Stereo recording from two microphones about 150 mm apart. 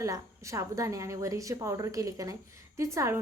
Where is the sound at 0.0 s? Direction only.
20° right (ahead or behind).